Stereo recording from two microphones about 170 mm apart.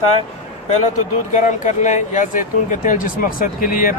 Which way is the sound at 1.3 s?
45° left (ahead or behind).